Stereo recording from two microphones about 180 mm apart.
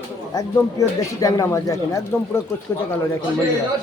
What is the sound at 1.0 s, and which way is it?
A man's voice, 20° left (ahead or behind).